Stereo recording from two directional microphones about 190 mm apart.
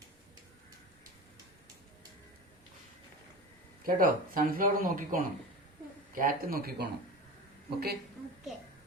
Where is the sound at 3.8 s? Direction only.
50° right (ahead or behind).